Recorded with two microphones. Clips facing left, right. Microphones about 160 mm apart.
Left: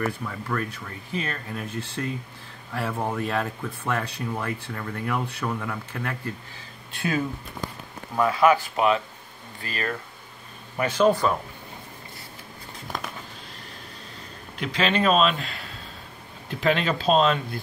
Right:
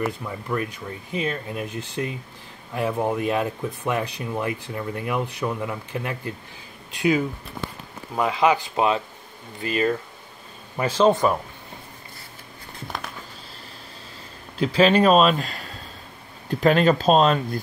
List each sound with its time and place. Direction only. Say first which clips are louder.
0.0 s speech: right 1 dB; 15° right (ahead or behind)
8.2 s speech: left 1 dB; 20° right (ahead or behind)
10.8 s a man's voice: right 2 dB; 30° right (ahead or behind)
14.6 s a man's voice: right 7 dB; 35° right (ahead or behind)